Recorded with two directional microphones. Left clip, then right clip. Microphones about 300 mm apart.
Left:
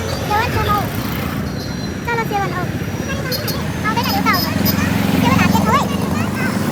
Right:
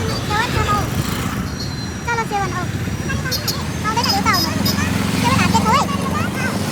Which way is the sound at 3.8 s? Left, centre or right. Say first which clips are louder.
Even; right.